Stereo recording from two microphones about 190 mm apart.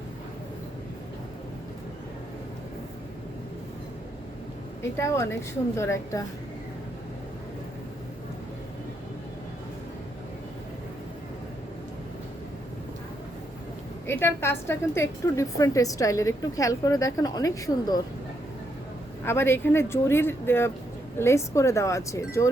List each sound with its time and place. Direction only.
4.8 s a woman's voice: 15° left (ahead or behind)
14.1 s a woman's voice: 10° left (ahead or behind)
19.2 s a woman's voice: 10° left (ahead or behind)